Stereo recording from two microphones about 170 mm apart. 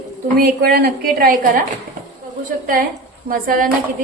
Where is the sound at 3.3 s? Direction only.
55° right (ahead or behind).